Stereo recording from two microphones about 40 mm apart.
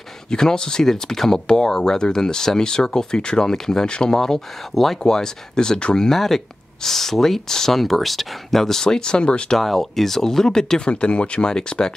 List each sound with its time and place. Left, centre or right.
0.3 s speech: centre
4.7 s speech: centre
5.0 s speech: centre
5.9 s speech: centre; by 9.6 s left
9.6 s speech: centre
10.9 s speech: left